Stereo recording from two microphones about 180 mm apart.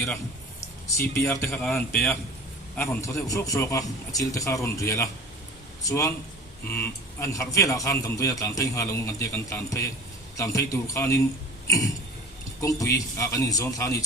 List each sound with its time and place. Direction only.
1.1 s a man's voice: 15° left (ahead or behind)
1.6 s a man's voice: 5° left (ahead or behind)
12.6 s a man's voice: 15° left (ahead or behind)